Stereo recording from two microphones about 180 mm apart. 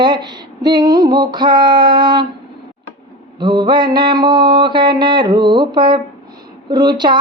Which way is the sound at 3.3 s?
25° right (ahead or behind).